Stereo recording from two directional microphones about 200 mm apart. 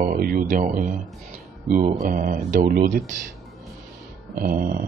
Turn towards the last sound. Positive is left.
turn(degrees=-45)  # may be behind; listen again after turning